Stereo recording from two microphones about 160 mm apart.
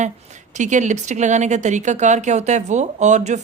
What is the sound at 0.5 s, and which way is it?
Speech, 50° right (ahead or behind).